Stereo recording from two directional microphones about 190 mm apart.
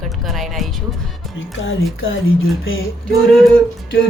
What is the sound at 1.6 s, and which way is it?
Speech, 85° left.